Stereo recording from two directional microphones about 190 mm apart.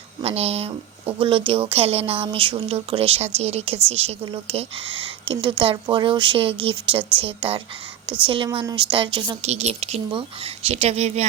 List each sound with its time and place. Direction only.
0.2 s a woman's voice: 30° right (ahead or behind)